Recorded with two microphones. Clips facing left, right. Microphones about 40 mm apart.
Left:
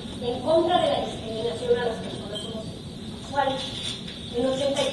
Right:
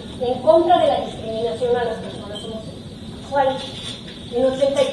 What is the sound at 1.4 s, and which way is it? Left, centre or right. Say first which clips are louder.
Speech: right 4 dB; right.